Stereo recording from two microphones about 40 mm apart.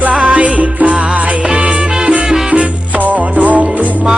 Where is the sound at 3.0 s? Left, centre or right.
Right.